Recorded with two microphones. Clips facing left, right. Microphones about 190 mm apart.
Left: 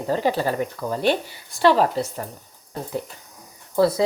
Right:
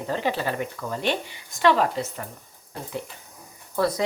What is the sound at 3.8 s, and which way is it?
Speech, 30° left (ahead or behind).